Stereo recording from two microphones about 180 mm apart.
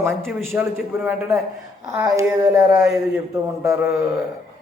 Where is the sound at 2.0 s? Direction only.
20° right (ahead or behind).